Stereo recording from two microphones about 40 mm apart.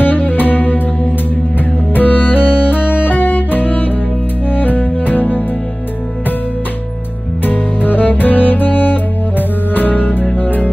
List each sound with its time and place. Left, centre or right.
0.0 s music: left
2.0 s music: left
7.4 s music: left